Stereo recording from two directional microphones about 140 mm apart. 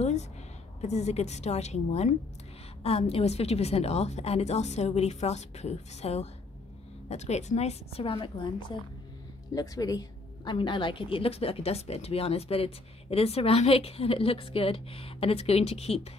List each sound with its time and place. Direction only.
0.7 s a woman's voice: 50° left (ahead or behind); by 8.7 s 35° left (ahead or behind)
9.5 s a woman's voice: 25° left (ahead or behind); by 16.1 s 45° left (ahead or behind)